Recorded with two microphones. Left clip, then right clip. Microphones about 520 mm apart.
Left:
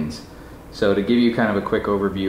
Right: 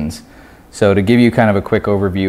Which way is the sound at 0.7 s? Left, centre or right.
Right.